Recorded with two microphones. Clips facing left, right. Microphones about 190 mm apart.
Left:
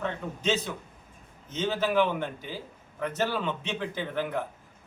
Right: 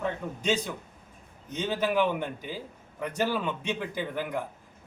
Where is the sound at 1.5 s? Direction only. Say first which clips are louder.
Left 1 dB; 15° right (ahead or behind).